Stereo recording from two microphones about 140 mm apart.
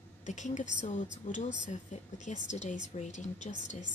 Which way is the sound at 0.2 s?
60° left (ahead or behind).